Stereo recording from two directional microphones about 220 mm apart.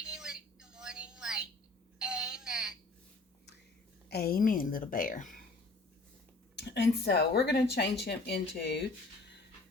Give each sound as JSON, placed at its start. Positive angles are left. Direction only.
{"t": 0.0, "sound": "music", "side_deg": -5}
{"t": 2.0, "sound": "a sound", "side_deg": -5}
{"t": 4.1, "sound": "a woman's voice", "side_deg": 45}
{"t": 6.6, "sound": "speech", "side_deg": 50}